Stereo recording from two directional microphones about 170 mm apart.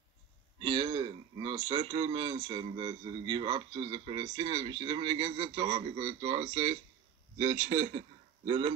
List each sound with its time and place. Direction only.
0.6 s speech: 30° right (ahead or behind)
7.3 s a man's voice: 45° right (ahead or behind)